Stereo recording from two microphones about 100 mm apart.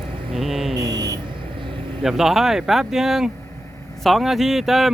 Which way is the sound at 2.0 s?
5° right (ahead or behind).